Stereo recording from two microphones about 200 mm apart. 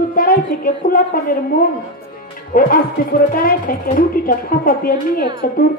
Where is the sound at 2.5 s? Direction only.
45° left (ahead or behind).